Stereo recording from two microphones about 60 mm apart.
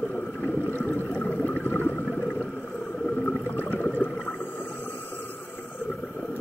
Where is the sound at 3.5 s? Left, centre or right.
Left.